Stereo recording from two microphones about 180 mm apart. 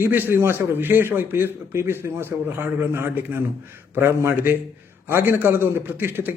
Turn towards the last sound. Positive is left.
turn(degrees=-10)  # may be behind; listen again after turning